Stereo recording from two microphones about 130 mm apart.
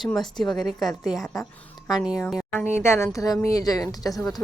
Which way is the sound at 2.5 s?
20° left (ahead or behind).